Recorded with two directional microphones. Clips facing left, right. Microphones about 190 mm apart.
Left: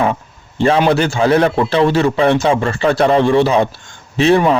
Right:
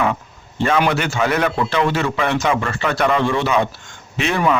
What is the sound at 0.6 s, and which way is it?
A man's voice, 30° left (ahead or behind).